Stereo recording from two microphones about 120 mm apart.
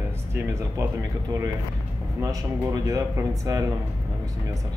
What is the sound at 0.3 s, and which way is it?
Speech, 25° right (ahead or behind).